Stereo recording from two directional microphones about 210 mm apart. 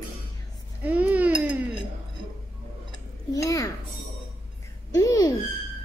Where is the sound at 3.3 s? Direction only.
15° left (ahead or behind).